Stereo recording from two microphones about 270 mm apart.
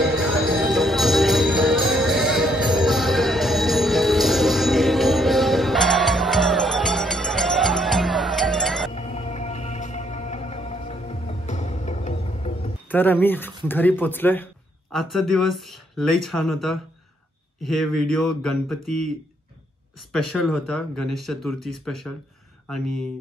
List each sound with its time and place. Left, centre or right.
0.7 s jingle bell: centre
8.9 s music: left
12.9 s speech: centre
20.1 s speech: centre